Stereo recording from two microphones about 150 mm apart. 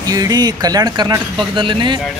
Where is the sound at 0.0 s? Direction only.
25° right (ahead or behind).